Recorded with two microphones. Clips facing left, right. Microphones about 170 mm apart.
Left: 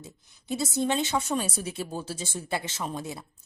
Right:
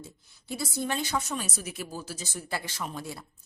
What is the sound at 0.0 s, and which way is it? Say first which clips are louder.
A woman's voice: even; 20° left (ahead or behind).